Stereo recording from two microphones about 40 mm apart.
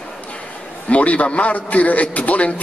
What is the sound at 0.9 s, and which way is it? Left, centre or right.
A man's voice, left.